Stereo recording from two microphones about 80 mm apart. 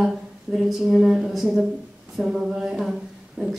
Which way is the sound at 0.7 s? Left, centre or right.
Centre.